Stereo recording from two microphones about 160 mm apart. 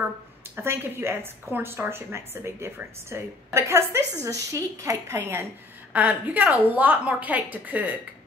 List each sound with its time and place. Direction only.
0.6 s a woman's voice: 15° right (ahead or behind)